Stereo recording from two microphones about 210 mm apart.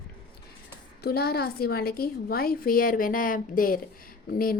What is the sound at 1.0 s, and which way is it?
A woman's voice, 50° left (ahead or behind).